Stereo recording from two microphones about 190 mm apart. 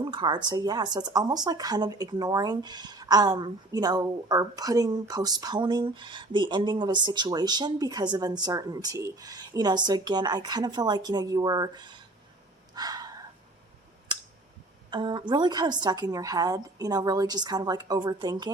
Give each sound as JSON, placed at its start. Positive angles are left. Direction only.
{"t": 0.0, "sound": "speech", "side_deg": -25}
{"t": 12.7, "sound": "gasp", "side_deg": -20}
{"t": 14.8, "sound": "speech", "side_deg": -25}